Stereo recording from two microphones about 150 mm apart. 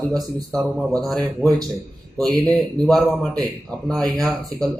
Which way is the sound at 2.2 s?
5° left (ahead or behind).